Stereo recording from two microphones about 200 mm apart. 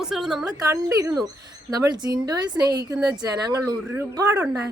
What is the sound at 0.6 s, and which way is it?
Speech, 15° right (ahead or behind).